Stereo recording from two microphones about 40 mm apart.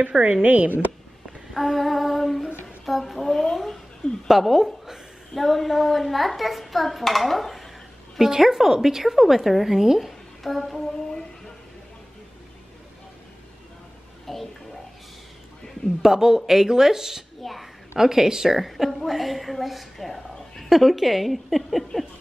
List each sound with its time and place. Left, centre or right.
0.2 s speech: right
1.5 s female singing: centre
4.3 s a woman's voice: centre
5.3 s a woman's voice: centre
14.2 s speech: centre
16.0 s a woman's voice: centre
17.4 s a child's voice: centre
17.9 s a woman's voice: centre